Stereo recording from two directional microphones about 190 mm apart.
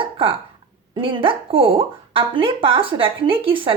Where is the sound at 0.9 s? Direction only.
25° right (ahead or behind).